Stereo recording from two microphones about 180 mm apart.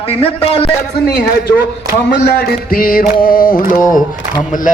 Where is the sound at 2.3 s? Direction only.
55° left (ahead or behind).